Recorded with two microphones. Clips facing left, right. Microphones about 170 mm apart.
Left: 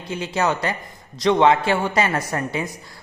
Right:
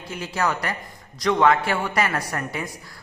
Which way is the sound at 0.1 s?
25° left (ahead or behind).